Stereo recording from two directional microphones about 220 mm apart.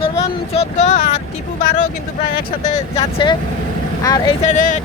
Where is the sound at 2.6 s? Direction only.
25° left (ahead or behind).